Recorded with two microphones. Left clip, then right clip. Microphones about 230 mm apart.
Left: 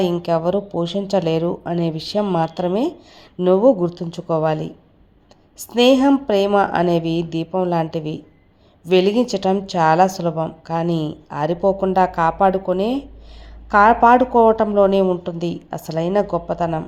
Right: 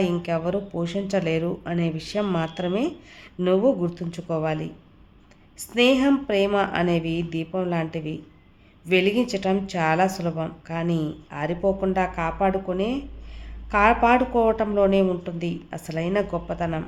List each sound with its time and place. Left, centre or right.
0.2 s a woman's voice: centre
5.7 s a woman's voice: centre
10.8 s speech: centre
11.3 s a woman's voice: centre